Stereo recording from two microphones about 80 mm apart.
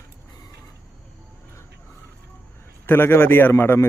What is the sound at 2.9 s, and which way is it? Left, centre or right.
Speech, left.